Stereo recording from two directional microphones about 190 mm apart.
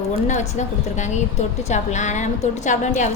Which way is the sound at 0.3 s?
40° left (ahead or behind).